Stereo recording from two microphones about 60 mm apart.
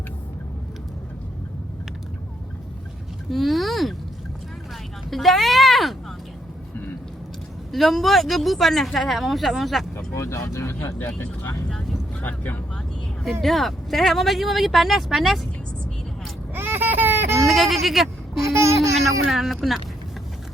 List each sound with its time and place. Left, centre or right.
3.2 s a sound: centre
5.1 s a sound: centre
7.7 s speech: centre
10.2 s speech: left
12.2 s speech: left
13.4 s speech: centre
16.6 s a sound: right
17.4 s speech: centre
17.8 s bleat: centre
18.4 s speech: right
19.3 s speech: centre